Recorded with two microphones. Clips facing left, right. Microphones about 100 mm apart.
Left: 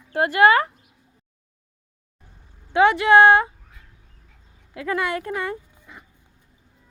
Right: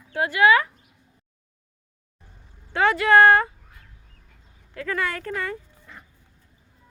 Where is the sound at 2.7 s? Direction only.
20° left (ahead or behind).